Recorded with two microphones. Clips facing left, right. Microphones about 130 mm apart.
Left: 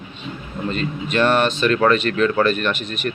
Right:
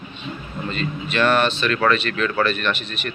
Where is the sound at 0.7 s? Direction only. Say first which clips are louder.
Left 2 dB; 40° left (ahead or behind).